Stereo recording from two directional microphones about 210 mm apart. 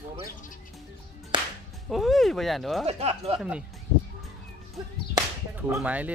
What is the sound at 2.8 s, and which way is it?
Speech, 30° right (ahead or behind).